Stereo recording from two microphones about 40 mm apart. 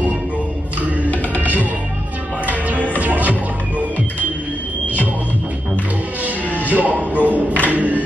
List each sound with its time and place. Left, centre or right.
1.4 s music: right
6.2 s music: right